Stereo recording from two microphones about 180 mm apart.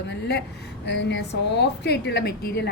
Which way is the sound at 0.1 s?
70° left (ahead or behind).